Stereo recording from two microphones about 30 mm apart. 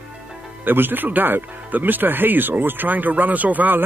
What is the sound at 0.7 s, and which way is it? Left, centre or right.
Speech, right.